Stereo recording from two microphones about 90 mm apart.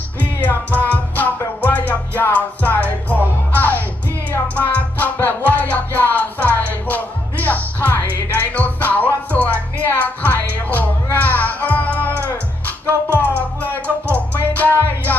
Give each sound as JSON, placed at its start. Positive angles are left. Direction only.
{"t": 0.2, "sound": "music", "side_deg": 15}